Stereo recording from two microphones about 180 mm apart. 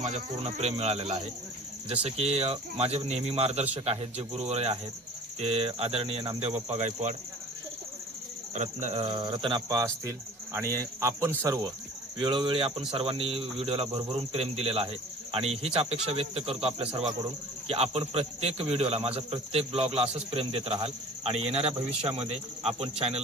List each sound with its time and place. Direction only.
0.0 s cricket: 35° right (ahead or behind)
8.5 s speech: 40° right (ahead or behind); by 11.7 s 15° right (ahead or behind)
12.2 s speech: 25° right (ahead or behind)
12.9 s cricket: 30° right (ahead or behind)